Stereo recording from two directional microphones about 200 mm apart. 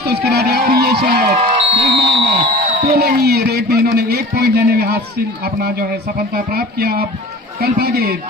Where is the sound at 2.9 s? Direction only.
55° right (ahead or behind).